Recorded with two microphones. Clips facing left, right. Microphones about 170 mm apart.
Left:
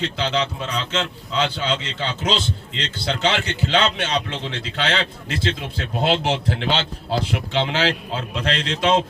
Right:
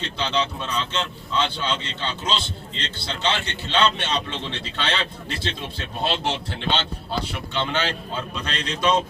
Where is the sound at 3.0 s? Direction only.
90° left.